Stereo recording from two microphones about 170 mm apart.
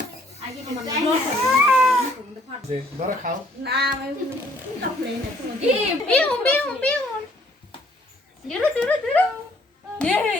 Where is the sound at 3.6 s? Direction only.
70° right (ahead or behind).